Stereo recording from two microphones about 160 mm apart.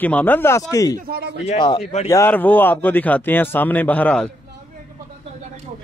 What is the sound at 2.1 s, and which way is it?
A man's voice, 15° left (ahead or behind).